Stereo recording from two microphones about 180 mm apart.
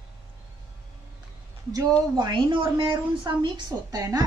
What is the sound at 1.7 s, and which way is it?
A woman's voice, 20° right (ahead or behind).